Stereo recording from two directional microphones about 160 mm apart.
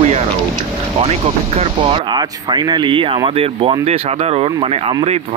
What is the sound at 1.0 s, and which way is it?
Speech, 40° right (ahead or behind).